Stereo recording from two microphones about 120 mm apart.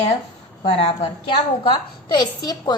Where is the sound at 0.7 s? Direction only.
55° left (ahead or behind).